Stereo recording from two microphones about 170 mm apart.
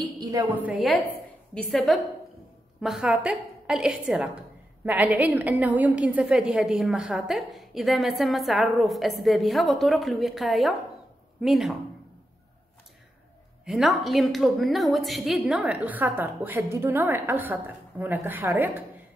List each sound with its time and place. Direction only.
0.2 s a woman's voice: 20° right (ahead or behind)
0.6 s a woman's voice: 5° right (ahead or behind)
13.7 s a woman's voice: centre (ahead or behind)